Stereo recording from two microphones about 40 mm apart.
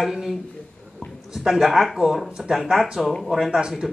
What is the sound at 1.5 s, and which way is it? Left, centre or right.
Speech, centre.